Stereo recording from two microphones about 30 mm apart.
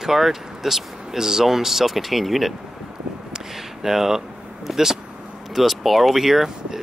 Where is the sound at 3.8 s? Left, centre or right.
Centre.